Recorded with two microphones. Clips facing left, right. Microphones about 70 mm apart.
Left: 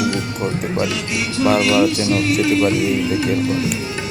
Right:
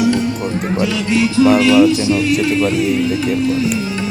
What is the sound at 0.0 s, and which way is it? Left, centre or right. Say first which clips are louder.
Music: right 5 dB; centre.